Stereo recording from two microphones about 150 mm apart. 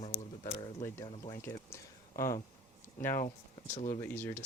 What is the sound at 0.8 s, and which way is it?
Speech, 20° left (ahead or behind).